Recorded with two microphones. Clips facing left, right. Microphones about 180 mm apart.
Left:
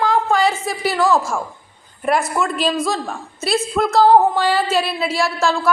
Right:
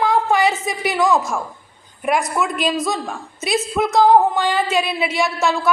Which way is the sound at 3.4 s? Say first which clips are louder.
Left 1 dB; 20° right (ahead or behind).